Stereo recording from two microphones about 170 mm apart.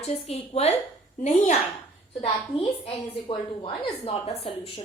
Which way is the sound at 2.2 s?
35° left (ahead or behind).